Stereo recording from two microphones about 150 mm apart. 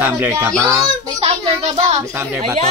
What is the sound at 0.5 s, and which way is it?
Speech, 5° left (ahead or behind).